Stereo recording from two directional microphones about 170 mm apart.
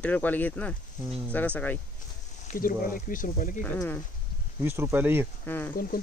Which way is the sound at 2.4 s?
55° left (ahead or behind).